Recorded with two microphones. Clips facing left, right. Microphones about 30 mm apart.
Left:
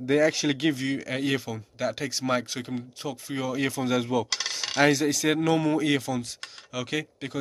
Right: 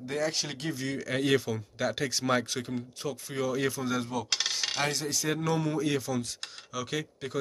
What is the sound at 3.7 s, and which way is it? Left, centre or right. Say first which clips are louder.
Speech: left 5 dB; left.